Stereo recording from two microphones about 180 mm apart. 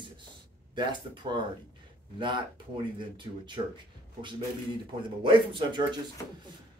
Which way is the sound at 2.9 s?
25° right (ahead or behind).